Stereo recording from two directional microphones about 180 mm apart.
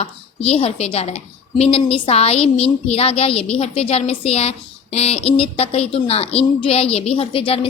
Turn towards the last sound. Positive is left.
turn(degrees=30)  # may be behind; listen again after turning